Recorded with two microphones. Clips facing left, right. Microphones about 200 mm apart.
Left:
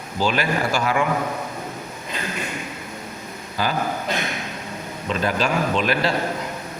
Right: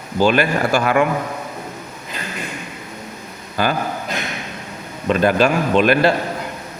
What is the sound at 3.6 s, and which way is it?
Speech, 60° right (ahead or behind).